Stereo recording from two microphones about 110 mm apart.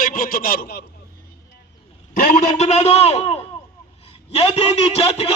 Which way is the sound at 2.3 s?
85° left.